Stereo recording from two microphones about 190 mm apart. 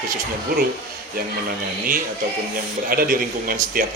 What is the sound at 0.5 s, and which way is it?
Speech, 55° right (ahead or behind).